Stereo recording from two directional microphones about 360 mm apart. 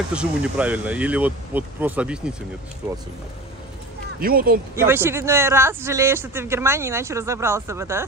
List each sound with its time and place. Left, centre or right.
0.1 s speech: centre
4.2 s speech: right
4.7 s speech: centre